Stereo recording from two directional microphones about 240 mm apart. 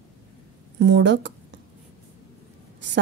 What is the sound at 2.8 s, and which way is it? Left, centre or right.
Speech, right.